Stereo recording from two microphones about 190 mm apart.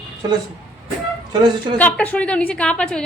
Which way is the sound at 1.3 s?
25° right (ahead or behind).